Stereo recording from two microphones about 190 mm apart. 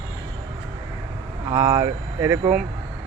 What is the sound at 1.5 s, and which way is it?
Speech, 20° right (ahead or behind).